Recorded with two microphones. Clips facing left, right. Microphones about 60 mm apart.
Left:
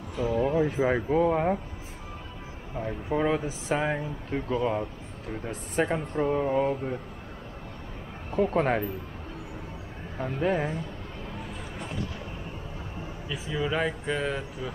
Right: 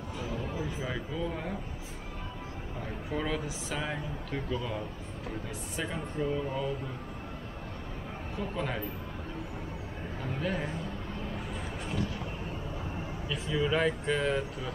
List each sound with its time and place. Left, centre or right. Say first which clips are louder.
0.3 s speech: left 13 dB; left
2.8 s speech: left 8 dB; left
8.4 s speech: left 11 dB; left
10.1 s speech: left 7 dB; left
13.3 s speech: even; centre